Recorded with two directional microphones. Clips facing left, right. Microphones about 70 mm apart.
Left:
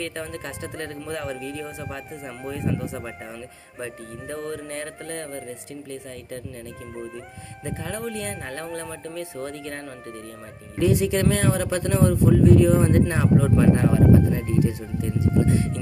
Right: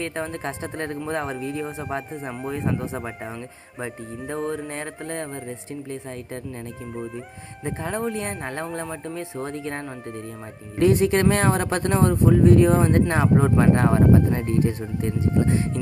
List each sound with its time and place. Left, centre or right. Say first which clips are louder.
0.0 s speech: right 3 dB; right
4.4 s speech: right 5 dB; centre
4.7 s speech: right 1 dB; right
7.6 s speech: right 4 dB; right
8.8 s speech: right 3 dB; centre
9.1 s speech: even; right
10.8 s speech: right 3 dB; right
15.4 s speech: even; right